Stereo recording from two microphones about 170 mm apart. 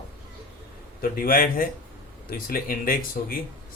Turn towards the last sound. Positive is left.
turn(degrees=55)  # may be behind; listen again after turning